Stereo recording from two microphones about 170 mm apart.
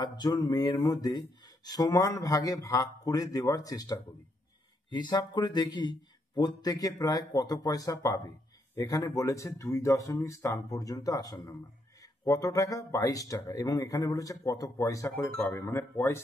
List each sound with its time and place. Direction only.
0.0 s speech: 25° left (ahead or behind)